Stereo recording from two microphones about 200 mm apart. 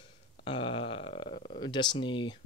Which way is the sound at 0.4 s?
30° left (ahead or behind).